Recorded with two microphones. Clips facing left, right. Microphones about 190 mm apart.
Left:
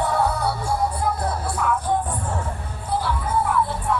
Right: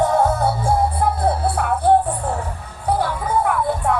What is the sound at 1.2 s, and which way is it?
Music, 30° right (ahead or behind).